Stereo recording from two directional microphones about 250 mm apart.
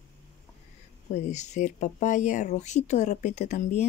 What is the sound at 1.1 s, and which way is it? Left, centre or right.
Speech, left.